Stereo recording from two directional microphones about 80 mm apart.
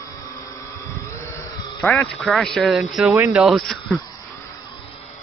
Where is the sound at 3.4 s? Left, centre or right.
Centre.